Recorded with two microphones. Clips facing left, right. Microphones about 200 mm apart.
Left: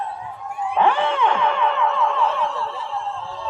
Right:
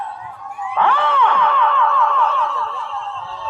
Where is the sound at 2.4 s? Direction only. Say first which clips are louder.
Right 1 dB; 25° left (ahead or behind).